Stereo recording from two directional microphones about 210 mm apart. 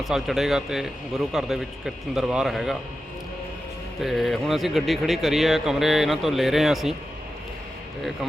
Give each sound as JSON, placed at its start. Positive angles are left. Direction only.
{"t": 0.0, "sound": "speech", "side_deg": 0}
{"t": 4.0, "sound": "speech", "side_deg": 0}